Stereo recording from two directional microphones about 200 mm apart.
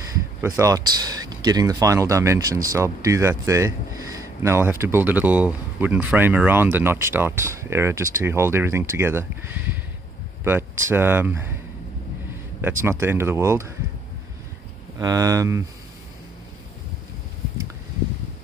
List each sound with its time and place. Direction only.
0.4 s speech: 15° right (ahead or behind)
12.8 s speech: 10° right (ahead or behind)
15.0 s speech: 15° right (ahead or behind)